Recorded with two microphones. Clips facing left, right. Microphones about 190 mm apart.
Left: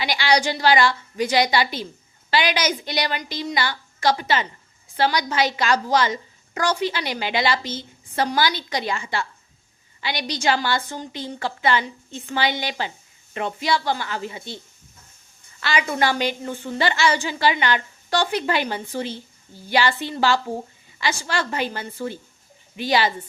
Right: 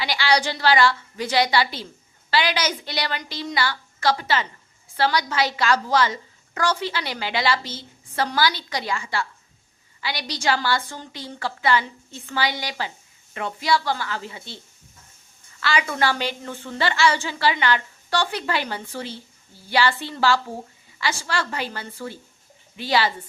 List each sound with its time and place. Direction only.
0.0 s a woman's voice: 15° left (ahead or behind)
15.6 s a woman's voice: 20° left (ahead or behind)